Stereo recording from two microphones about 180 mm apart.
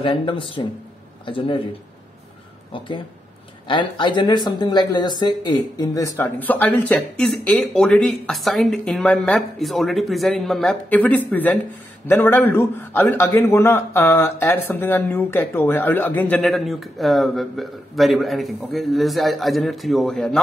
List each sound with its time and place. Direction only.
0.0 s speech: 25° left (ahead or behind)
3.6 s a man's voice: 25° left (ahead or behind); by 20.4 s centre (ahead or behind)